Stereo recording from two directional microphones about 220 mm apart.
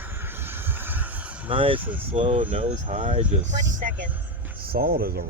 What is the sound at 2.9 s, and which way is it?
Speech, 35° right (ahead or behind).